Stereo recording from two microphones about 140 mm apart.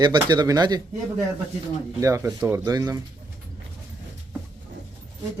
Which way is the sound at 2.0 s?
20° right (ahead or behind).